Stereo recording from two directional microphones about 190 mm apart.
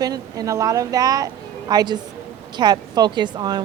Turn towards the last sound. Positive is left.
turn(degrees=-20)  # may be behind; listen again after turning